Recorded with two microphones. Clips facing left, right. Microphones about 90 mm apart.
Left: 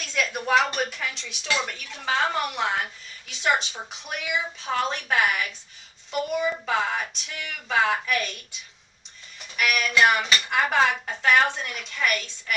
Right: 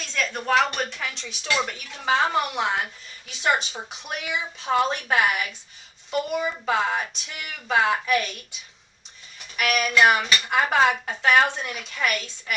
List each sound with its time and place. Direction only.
0.0 s a woman's voice: 10° left (ahead or behind); by 2.7 s 10° right (ahead or behind)
3.2 s speech: centre (ahead or behind)
3.7 s speech: 15° right (ahead or behind)
9.6 s speech: 10° right (ahead or behind)